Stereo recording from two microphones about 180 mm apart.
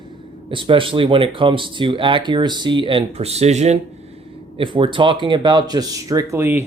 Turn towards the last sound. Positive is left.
turn(degrees=-15)  # may be behind; listen again after turning